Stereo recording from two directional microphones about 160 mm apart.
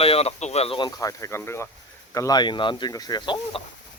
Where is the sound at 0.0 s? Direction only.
40° left (ahead or behind).